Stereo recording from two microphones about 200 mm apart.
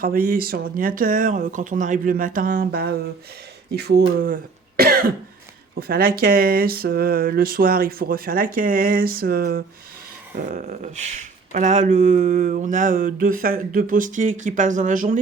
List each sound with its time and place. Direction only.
0.0 s speech: 45° right (ahead or behind)
4.8 s cough: 50° right (ahead or behind)
5.9 s speech: 50° right (ahead or behind)